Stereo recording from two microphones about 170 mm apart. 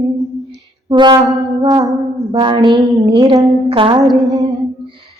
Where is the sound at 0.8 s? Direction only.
25° right (ahead or behind).